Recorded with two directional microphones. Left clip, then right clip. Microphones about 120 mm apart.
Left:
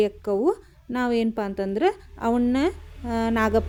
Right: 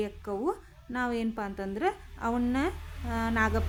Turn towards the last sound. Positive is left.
turn(degrees=40)  # may be behind; listen again after turning